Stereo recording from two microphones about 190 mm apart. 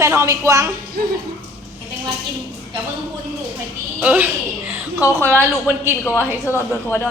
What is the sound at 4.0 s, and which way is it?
Speech, 10° right (ahead or behind).